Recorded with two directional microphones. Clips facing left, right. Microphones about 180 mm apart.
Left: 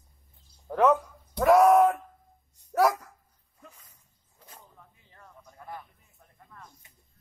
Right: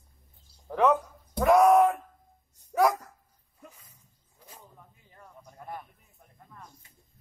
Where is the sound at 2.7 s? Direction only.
Centre (ahead or behind).